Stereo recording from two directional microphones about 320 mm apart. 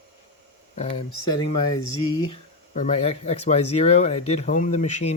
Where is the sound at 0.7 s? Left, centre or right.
Left.